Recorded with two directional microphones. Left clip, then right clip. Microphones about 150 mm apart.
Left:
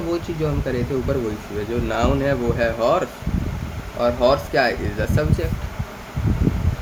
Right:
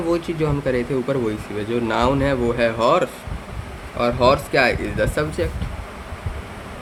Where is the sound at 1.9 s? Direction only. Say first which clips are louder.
Right 1 dB; 50° right (ahead or behind).